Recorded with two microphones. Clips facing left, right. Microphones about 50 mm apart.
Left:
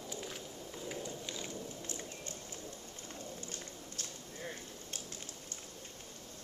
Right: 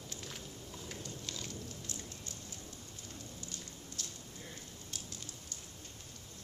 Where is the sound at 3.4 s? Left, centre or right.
Left.